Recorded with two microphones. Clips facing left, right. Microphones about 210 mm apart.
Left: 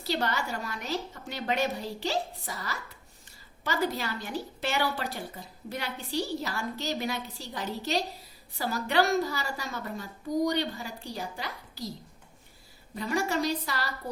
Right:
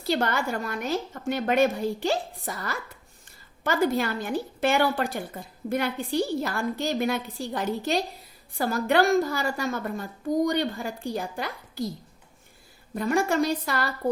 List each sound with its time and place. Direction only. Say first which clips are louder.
0.0 s a woman's voice: right 5 dB; 50° right (ahead or behind)
12.9 s a woman's voice: right 5 dB; 50° right (ahead or behind)